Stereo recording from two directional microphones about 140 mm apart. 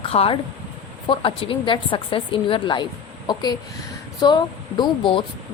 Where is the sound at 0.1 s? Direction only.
45° left (ahead or behind).